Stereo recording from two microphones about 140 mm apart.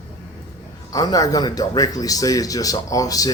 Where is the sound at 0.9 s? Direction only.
25° left (ahead or behind).